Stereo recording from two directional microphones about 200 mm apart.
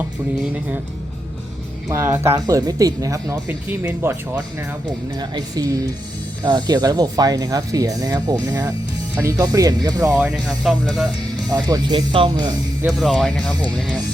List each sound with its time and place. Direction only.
1.9 s speech: 10° right (ahead or behind)
10.2 s speech: 5° left (ahead or behind)
11.4 s speech: 20° right (ahead or behind)
12.8 s speech: centre (ahead or behind)